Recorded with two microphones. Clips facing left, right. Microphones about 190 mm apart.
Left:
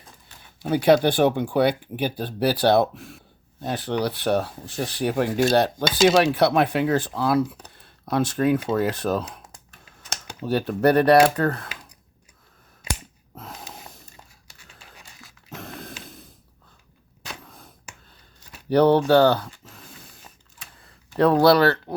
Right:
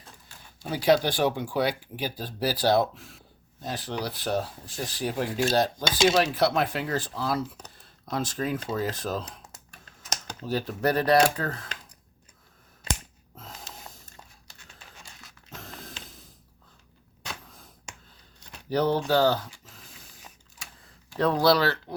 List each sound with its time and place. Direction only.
0.7 s speech: 60° left (ahead or behind)
5.3 s dishes: 40° left (ahead or behind)
6.1 s speech: 65° left (ahead or behind)
10.4 s speech: 65° left (ahead or behind)
13.3 s gasp: 65° left (ahead or behind)
15.4 s a sound: 65° left (ahead or behind)
18.7 s speech: 65° left (ahead or behind)
21.2 s speech: 65° left (ahead or behind)